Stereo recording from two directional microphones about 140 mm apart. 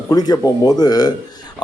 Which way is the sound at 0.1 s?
25° left (ahead or behind).